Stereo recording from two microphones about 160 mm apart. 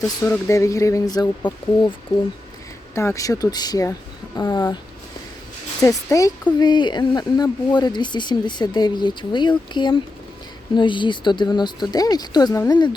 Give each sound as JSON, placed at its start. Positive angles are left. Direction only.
{"t": 0.2, "sound": "speech", "side_deg": 20}
{"t": 2.1, "sound": "speech", "side_deg": 40}
{"t": 2.9, "sound": "speech", "side_deg": 15}
{"t": 5.8, "sound": "speech", "side_deg": 20}